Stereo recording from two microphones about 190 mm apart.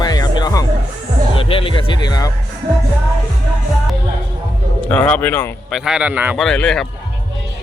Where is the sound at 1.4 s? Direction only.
30° left (ahead or behind).